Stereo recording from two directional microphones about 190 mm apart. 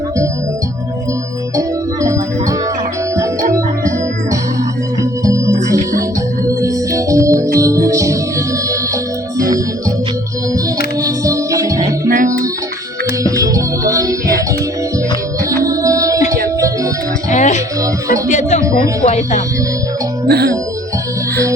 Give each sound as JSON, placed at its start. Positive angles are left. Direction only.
{"t": 1.5, "sound": "organ", "side_deg": -15}
{"t": 5.2, "sound": "music", "side_deg": -15}
{"t": 11.0, "sound": "music", "side_deg": -15}
{"t": 12.0, "sound": "music", "side_deg": -50}
{"t": 13.2, "sound": "music", "side_deg": -15}
{"t": 15.6, "sound": "music", "side_deg": -15}
{"t": 17.3, "sound": "music", "side_deg": 40}
{"t": 20.2, "sound": "music", "side_deg": -55}